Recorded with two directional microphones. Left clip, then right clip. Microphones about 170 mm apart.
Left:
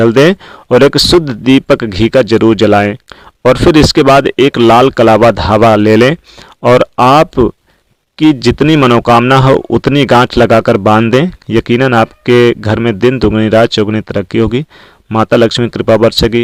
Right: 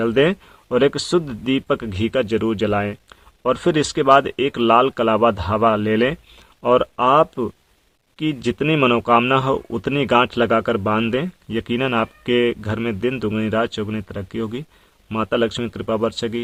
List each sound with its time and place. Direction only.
0.0 s speech: 45° left (ahead or behind)